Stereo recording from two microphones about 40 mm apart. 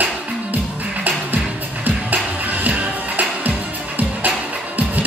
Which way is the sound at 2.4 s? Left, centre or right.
Right.